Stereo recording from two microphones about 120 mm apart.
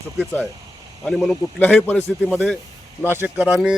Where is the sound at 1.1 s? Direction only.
Centre (ahead or behind).